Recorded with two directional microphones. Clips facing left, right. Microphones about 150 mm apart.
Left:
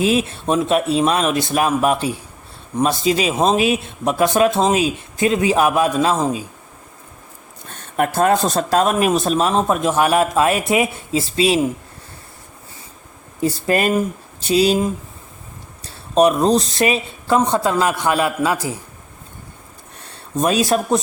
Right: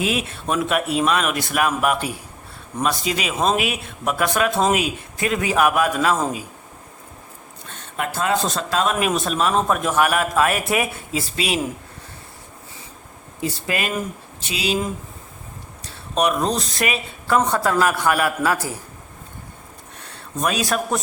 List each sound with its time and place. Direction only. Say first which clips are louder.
0.0 s speech: left 6 dB; 30° left (ahead or behind)
7.7 s speech: left 7 dB; 45° left (ahead or behind)
13.4 s speech: left 7 dB; 40° left (ahead or behind)
16.1 s speech: left 6 dB; 30° left (ahead or behind)
20.4 s speech: left 5 dB; 25° left (ahead or behind)